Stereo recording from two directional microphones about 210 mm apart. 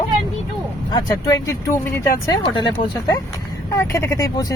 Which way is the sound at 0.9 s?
20° left (ahead or behind).